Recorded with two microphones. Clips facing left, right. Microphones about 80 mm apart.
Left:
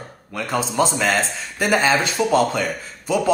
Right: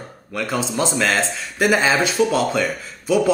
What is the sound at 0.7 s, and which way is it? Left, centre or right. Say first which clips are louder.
Speech: left 1 dB; centre.